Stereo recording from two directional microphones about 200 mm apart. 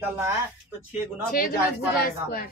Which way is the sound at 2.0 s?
50° left (ahead or behind).